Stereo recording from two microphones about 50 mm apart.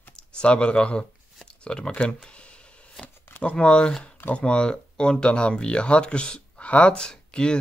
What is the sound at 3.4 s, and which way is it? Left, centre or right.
Speech, left.